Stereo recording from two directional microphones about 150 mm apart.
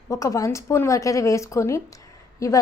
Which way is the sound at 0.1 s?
20° left (ahead or behind).